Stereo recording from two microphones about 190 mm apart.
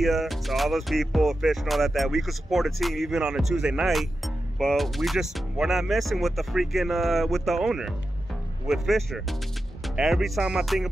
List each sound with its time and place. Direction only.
0.0 s music: centre (ahead or behind)